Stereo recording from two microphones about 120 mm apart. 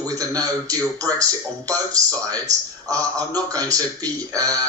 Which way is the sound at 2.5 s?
75° right (ahead or behind).